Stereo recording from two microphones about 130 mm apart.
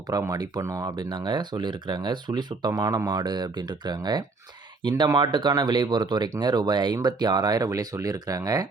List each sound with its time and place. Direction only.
0.1 s speech: 30° right (ahead or behind)